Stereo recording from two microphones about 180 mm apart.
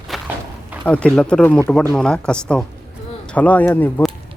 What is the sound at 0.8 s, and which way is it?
Speech, 5° left (ahead or behind).